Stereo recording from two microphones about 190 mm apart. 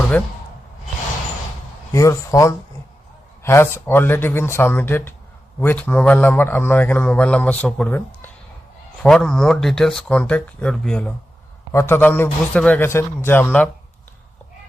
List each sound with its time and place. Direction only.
0.1 s a man's voice: 10° left (ahead or behind)
1.9 s a man's voice: 15° left (ahead or behind)